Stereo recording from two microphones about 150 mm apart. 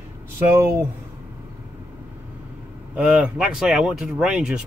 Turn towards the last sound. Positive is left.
turn(degrees=-5)  # may be behind; listen again after turning